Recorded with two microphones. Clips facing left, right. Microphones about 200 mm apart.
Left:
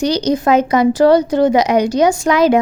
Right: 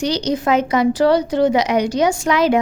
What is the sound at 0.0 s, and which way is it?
A woman's voice, 40° left (ahead or behind).